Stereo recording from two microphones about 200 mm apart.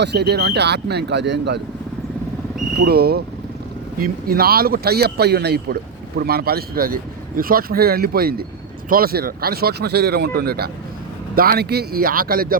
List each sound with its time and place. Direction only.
0.0 s speech: 55° right (ahead or behind)
2.8 s speech: 50° right (ahead or behind)